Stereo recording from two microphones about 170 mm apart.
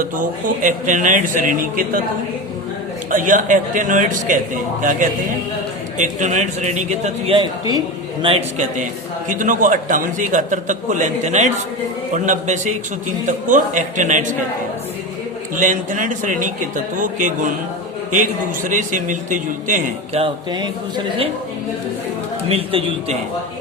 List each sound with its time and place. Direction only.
0.0 s a man's voice: 50° right (ahead or behind)
3.1 s a man's voice: 50° right (ahead or behind)
15.5 s a man's voice: 50° right (ahead or behind)
20.1 s speech: 30° right (ahead or behind)
22.4 s a man's voice: 35° right (ahead or behind)